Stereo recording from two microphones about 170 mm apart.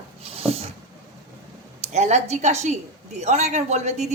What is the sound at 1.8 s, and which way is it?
A woman's voice, 45° right (ahead or behind).